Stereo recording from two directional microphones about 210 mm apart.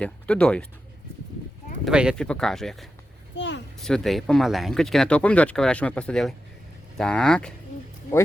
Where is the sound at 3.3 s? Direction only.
55° left (ahead or behind).